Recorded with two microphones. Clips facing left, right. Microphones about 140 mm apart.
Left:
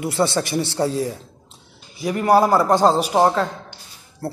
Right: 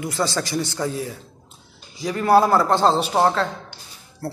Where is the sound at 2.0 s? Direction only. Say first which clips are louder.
Left 1 dB; 15° left (ahead or behind).